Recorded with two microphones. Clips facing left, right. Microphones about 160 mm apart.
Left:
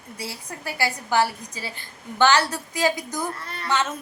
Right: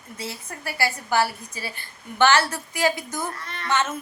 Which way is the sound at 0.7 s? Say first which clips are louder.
Even; 15° left (ahead or behind).